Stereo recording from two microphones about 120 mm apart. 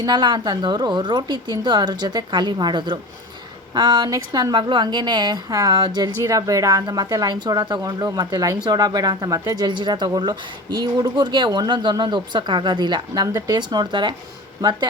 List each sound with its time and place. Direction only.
0.0 s speech: 35° right (ahead or behind)